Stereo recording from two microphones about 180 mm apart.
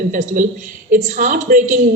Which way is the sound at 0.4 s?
50° right (ahead or behind).